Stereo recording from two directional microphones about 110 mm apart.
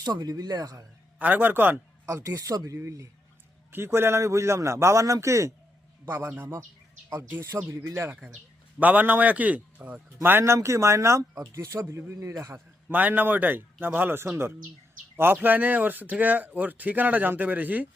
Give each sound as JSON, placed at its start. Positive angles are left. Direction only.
{"t": 0.0, "sound": "speech", "side_deg": -40}
{"t": 1.2, "sound": "speech", "side_deg": -15}
{"t": 8.1, "sound": "speech", "side_deg": -10}
{"t": 12.9, "sound": "speech", "side_deg": -15}